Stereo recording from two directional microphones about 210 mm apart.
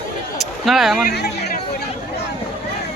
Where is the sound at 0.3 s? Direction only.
Centre (ahead or behind).